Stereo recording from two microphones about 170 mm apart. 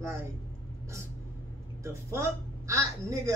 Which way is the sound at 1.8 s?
15° right (ahead or behind).